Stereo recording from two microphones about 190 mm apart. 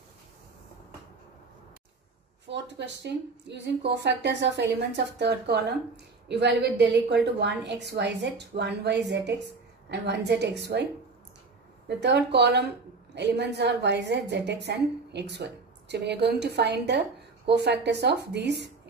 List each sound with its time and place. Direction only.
2.4 s a woman's voice: 65° right (ahead or behind)
12.0 s a woman's voice: 65° right (ahead or behind)